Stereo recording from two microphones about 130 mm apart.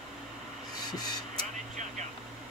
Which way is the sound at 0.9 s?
30° left (ahead or behind).